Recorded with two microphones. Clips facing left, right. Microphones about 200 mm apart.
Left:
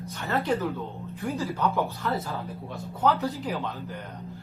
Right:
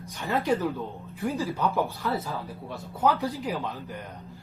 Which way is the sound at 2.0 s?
5° right (ahead or behind).